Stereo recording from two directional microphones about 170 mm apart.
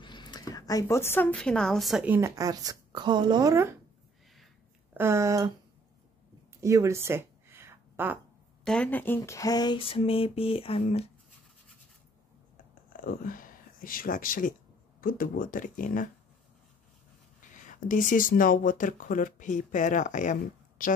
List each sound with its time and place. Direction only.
0.0 s speech: 25° left (ahead or behind); by 3.7 s 20° right (ahead or behind)
4.9 s speech: 15° right (ahead or behind)
6.6 s a sound: 15° right (ahead or behind)
8.6 s speech: 5° left (ahead or behind); by 11.1 s 35° left (ahead or behind)
12.9 s a sound: 55° left (ahead or behind)
15.0 s speech: 55° left (ahead or behind)
17.4 s speech: 50° left (ahead or behind)